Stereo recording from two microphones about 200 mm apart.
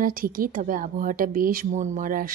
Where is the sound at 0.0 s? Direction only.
45° right (ahead or behind).